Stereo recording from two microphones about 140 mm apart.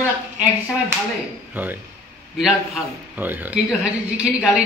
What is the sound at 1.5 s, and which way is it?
A man's voice, 15° right (ahead or behind).